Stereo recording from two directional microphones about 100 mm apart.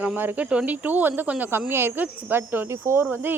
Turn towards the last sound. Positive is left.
turn(degrees=-20)  # may be behind; listen again after turning